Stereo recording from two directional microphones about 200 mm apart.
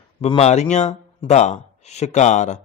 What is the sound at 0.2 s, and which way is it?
A man's voice, 30° left (ahead or behind).